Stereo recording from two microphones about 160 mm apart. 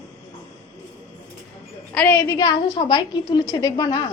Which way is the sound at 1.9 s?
10° left (ahead or behind).